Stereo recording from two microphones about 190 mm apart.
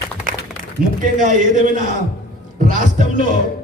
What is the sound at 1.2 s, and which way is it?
A man's voice, 45° right (ahead or behind).